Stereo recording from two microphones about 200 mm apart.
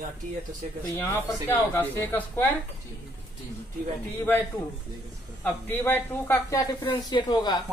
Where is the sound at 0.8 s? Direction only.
10° left (ahead or behind).